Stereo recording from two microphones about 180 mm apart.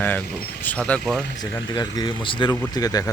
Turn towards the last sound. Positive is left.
turn(degrees=20)  # may be behind; listen again after turning